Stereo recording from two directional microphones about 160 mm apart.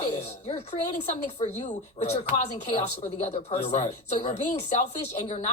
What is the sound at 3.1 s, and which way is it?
Speech, 45° left (ahead or behind).